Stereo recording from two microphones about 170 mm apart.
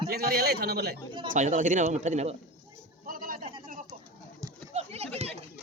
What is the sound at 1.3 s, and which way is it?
Speech, 45° right (ahead or behind).